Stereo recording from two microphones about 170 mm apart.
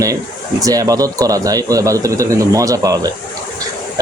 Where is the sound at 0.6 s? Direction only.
20° right (ahead or behind).